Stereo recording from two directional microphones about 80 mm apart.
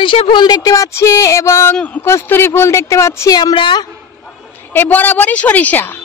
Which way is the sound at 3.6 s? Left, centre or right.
Left.